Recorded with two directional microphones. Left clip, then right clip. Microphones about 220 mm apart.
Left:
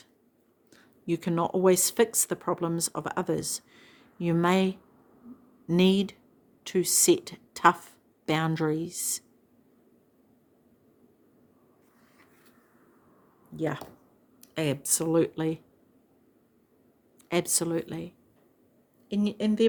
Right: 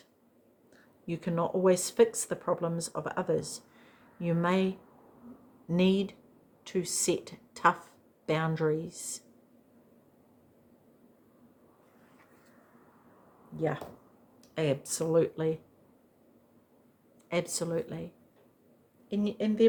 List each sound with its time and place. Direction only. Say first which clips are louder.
0.7 s a woman's voice: left 8 dB; 50° left (ahead or behind)
13.6 s speech: left 1 dB; 50° left (ahead or behind)
17.2 s speech: left 4 dB; 50° left (ahead or behind)